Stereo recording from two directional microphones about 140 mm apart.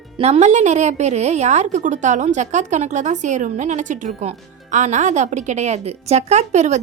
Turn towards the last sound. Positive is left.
turn(degrees=-55)  # may be behind; listen again after turning